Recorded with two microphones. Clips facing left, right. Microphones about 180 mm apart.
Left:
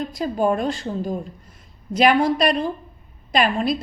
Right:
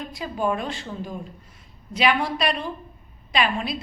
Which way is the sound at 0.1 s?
40° left (ahead or behind).